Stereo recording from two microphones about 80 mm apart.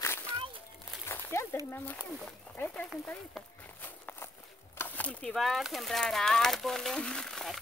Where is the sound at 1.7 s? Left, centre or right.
Left.